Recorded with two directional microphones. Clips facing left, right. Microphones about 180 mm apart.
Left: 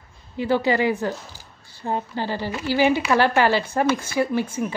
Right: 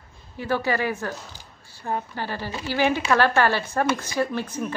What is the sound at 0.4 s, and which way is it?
A woman's voice, 15° left (ahead or behind).